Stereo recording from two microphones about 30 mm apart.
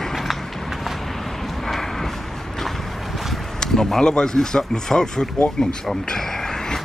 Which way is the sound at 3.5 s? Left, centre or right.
Left.